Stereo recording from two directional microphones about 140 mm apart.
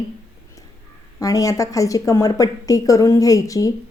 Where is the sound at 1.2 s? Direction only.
25° left (ahead or behind).